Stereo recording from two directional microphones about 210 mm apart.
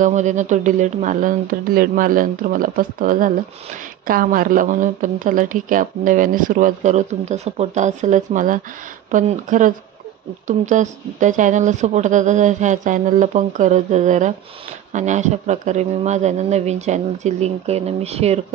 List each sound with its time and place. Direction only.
0.0 s speech: 35° right (ahead or behind)